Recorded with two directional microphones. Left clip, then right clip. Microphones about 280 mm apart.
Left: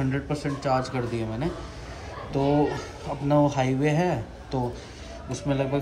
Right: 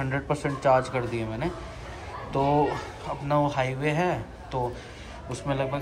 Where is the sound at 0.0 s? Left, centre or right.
Centre.